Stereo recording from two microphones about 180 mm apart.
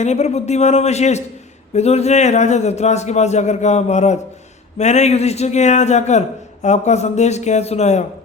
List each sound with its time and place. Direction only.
0.0 s a man's voice: 40° left (ahead or behind)